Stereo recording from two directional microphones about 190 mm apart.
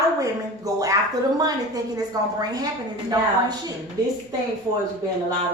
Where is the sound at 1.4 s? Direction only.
20° right (ahead or behind).